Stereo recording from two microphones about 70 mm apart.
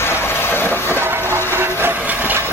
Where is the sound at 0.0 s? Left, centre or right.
Left.